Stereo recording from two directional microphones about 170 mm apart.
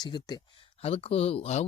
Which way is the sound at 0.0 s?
25° left (ahead or behind).